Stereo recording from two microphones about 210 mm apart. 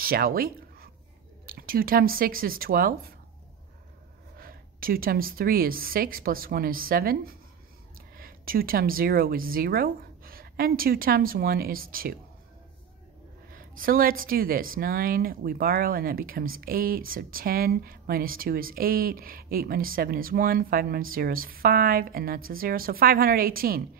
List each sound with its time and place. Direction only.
0.0 s speech: 45° right (ahead or behind)
4.4 s a woman's voice: 45° right (ahead or behind)
13.5 s speech: 40° right (ahead or behind)